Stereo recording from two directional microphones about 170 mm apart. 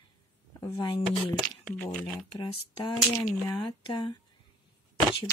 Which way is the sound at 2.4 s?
30° left (ahead or behind).